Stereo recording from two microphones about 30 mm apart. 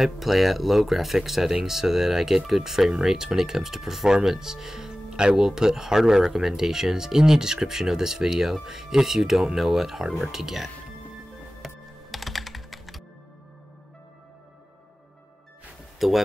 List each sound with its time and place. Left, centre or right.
0.0 s speech: centre
11.6 s computer keyboard: centre
16.0 s speech: centre